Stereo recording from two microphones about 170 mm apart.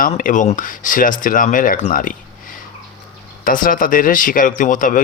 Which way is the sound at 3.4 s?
55° left (ahead or behind).